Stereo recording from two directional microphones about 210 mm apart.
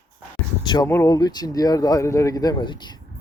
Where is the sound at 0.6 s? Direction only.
20° left (ahead or behind).